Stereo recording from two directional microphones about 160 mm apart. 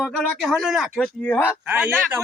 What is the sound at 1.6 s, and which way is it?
Speech, 10° right (ahead or behind).